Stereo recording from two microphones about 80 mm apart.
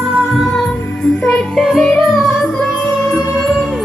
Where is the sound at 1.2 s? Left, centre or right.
Centre.